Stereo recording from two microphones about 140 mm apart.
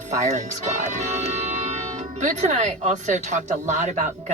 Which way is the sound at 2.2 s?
55° right (ahead or behind).